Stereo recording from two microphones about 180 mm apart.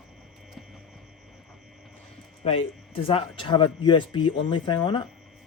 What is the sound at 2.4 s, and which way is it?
Speech, 30° left (ahead or behind).